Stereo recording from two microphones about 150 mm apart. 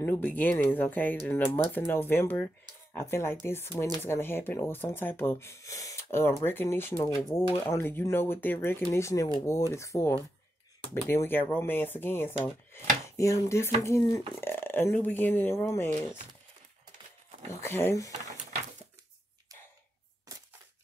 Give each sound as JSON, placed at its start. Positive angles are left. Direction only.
{"t": 0.0, "sound": "speech", "side_deg": 15}
{"t": 17.5, "sound": "speech", "side_deg": 15}